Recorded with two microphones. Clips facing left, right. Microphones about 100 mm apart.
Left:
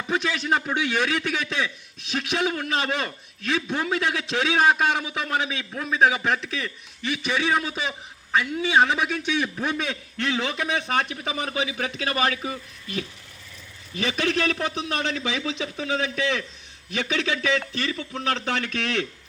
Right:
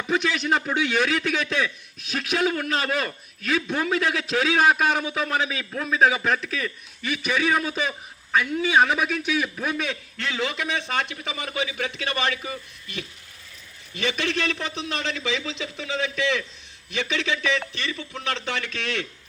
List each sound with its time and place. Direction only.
0.1 s a man's voice: 25° left (ahead or behind)